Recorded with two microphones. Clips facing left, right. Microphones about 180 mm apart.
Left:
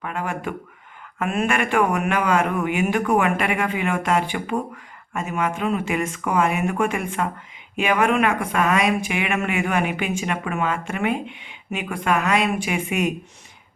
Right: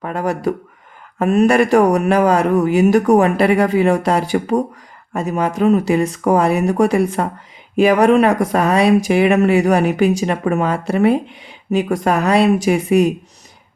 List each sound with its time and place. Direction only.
0.0 s speech: 40° right (ahead or behind)